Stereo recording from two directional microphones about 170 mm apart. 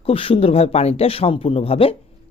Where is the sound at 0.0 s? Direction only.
35° left (ahead or behind).